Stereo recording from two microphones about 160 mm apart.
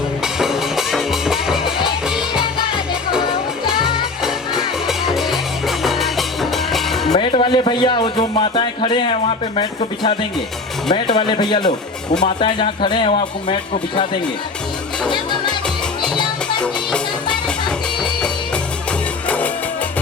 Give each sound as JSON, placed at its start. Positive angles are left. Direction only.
{"t": 0.3, "sound": "music", "side_deg": -5}
{"t": 3.8, "sound": "music", "side_deg": -5}
{"t": 7.2, "sound": "speech", "side_deg": 30}